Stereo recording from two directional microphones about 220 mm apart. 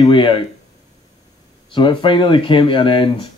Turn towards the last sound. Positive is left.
turn(degrees=20)  # may be behind; listen again after turning